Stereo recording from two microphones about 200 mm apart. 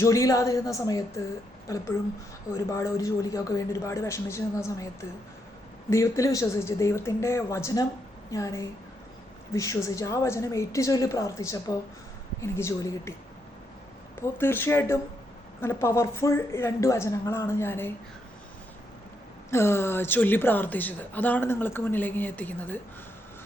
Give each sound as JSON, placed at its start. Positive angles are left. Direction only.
{"t": 0.0, "sound": "a woman's voice", "side_deg": 15}
{"t": 2.5, "sound": "a woman's voice", "side_deg": 15}
{"t": 14.2, "sound": "a woman's voice", "side_deg": 10}
{"t": 19.5, "sound": "a woman's voice", "side_deg": 15}